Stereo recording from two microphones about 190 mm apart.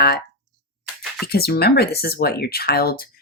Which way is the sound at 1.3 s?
55° left (ahead or behind).